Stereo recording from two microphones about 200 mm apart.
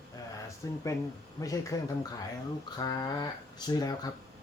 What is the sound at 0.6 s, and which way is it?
Speech, 15° left (ahead or behind).